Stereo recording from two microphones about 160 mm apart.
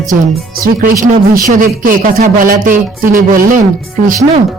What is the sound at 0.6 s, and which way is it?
Speech, 65° right (ahead or behind).